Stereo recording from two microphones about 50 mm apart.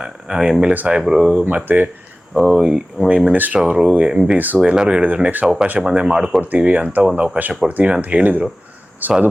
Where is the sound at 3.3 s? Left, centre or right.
Right.